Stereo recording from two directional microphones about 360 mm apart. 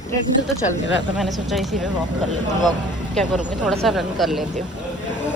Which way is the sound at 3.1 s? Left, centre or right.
Centre.